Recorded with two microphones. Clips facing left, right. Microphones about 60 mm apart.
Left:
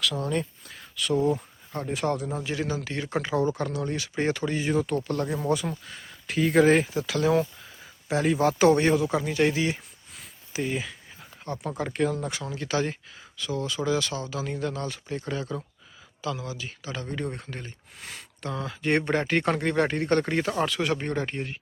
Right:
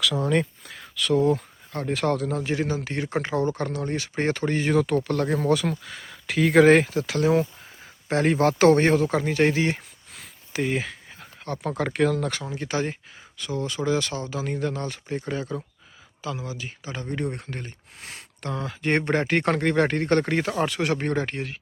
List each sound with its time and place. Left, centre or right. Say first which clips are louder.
1.1 s speech: right 3 dB; centre
2.4 s speech: right 3 dB; right
5.0 s speech: right 3 dB; right
5.3 s speech: right 6 dB; right
6.9 s speech: right 2 dB; right
8.0 s speech: right 2 dB; right
10.2 s a sound: right 3 dB; right
11.5 s speech: right 2 dB; right
11.9 s speech: right 4 dB; right
12.4 s speech: even; right
17.4 s speech: right 3 dB; right
18.1 s speech: right 2 dB; right
20.7 s speech: right 2 dB; right
21.3 s speech: right 1 dB; right